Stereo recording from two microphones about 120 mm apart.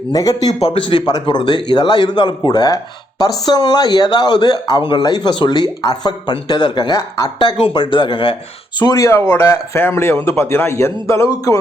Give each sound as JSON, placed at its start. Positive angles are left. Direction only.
{"t": 0.1, "sound": "a man's voice", "side_deg": 30}
{"t": 0.6, "sound": "a man's voice", "side_deg": 45}
{"t": 8.8, "sound": "speech", "side_deg": 25}